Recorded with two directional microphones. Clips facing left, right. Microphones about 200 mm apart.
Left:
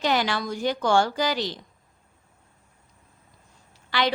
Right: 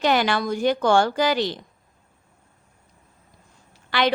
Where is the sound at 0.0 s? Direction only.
60° right (ahead or behind).